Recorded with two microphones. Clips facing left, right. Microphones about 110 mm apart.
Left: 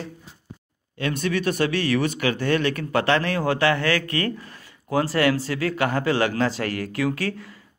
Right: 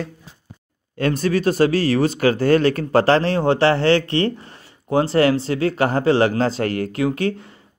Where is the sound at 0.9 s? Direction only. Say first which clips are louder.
Right 5 dB; 40° right (ahead or behind).